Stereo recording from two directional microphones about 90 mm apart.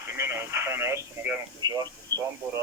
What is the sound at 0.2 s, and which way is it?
Speech, 30° right (ahead or behind).